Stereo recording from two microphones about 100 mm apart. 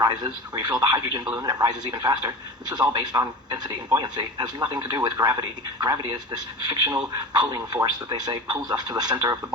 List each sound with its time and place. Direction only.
0.0 s a man's voice: 45° right (ahead or behind)